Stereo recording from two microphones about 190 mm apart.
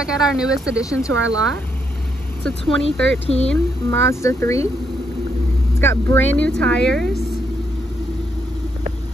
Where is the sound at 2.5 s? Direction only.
5° left (ahead or behind).